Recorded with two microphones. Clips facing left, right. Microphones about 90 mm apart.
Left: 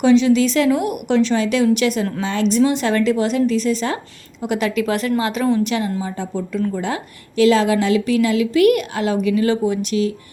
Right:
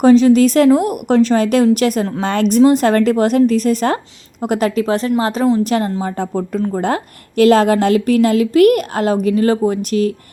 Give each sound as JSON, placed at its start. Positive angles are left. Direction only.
{"t": 0.0, "sound": "a woman's voice", "side_deg": -40}